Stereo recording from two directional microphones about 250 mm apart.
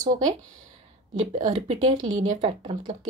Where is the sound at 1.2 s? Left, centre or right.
Right.